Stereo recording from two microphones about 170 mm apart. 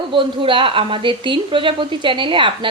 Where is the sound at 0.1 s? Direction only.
30° right (ahead or behind).